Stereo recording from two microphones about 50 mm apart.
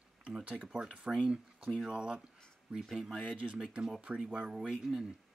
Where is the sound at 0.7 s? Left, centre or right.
Centre.